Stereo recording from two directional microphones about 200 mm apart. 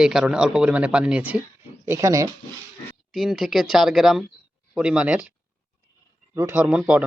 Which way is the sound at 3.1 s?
Centre (ahead or behind).